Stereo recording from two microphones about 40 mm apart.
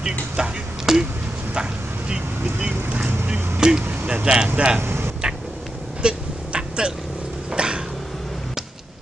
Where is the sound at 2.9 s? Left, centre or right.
Right.